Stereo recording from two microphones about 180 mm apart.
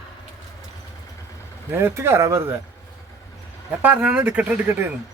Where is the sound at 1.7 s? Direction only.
15° right (ahead or behind).